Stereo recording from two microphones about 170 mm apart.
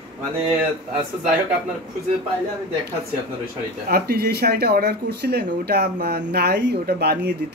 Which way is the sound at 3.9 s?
70° right (ahead or behind).